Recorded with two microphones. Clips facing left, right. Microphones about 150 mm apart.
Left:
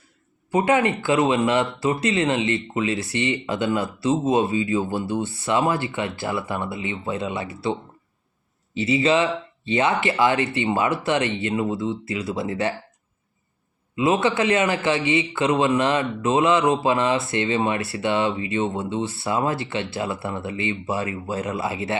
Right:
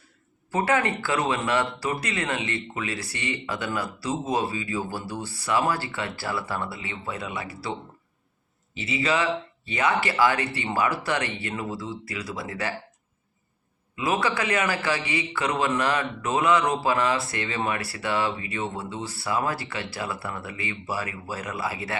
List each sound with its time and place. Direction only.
0.5 s a man's voice: 20° left (ahead or behind)
13.9 s a man's voice: 25° left (ahead or behind)